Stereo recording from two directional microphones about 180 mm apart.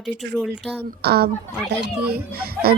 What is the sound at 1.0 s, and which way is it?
Speech, 60° right (ahead or behind).